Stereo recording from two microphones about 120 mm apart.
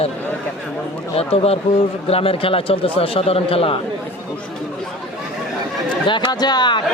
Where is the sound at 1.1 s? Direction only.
55° left (ahead or behind).